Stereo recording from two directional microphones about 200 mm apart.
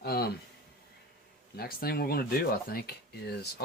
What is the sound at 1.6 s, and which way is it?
Speech, 50° left (ahead or behind).